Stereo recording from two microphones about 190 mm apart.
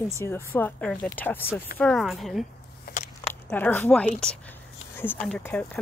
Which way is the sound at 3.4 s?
10° left (ahead or behind).